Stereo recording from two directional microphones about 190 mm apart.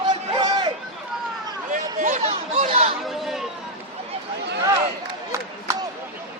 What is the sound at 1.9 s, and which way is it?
Chatter, 40° right (ahead or behind).